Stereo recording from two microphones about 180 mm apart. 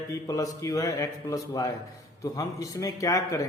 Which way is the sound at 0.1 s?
20° left (ahead or behind).